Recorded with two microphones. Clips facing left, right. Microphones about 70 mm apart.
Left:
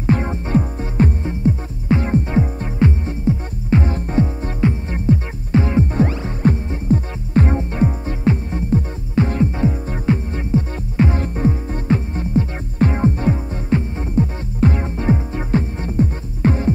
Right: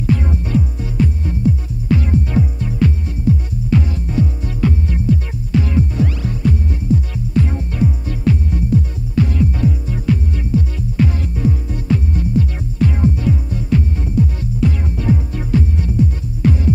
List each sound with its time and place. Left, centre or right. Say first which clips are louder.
0.0 s music: even; left